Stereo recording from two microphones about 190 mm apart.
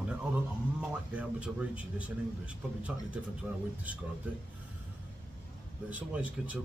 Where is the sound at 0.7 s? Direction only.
5° right (ahead or behind).